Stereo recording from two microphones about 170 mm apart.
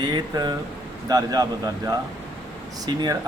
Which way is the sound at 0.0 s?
25° right (ahead or behind).